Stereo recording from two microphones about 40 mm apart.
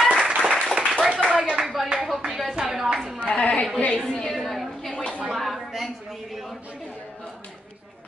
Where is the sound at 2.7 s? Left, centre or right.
Centre.